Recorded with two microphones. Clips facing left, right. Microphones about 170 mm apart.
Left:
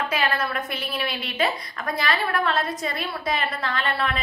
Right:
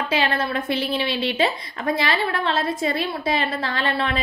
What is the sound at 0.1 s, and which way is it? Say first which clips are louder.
A woman's voice: right 3 dB; 30° right (ahead or behind).